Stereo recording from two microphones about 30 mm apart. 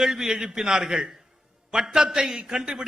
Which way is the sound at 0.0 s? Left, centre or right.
Centre.